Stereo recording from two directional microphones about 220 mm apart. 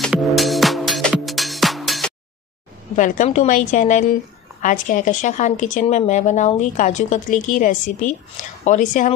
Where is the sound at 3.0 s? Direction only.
35° left (ahead or behind).